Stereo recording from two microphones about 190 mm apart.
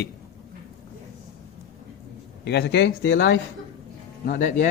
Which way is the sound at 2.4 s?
60° left (ahead or behind).